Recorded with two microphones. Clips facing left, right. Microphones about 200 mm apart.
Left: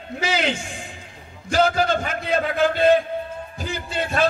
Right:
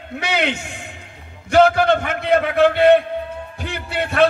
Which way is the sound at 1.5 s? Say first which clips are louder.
Right 6 dB; 60° right (ahead or behind).